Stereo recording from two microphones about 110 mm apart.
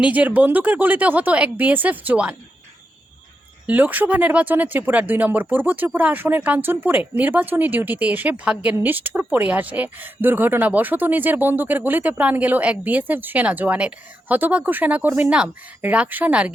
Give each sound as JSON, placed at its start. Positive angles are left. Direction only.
{"t": 0.0, "sound": "speech", "side_deg": -15}
{"t": 3.7, "sound": "speech", "side_deg": -15}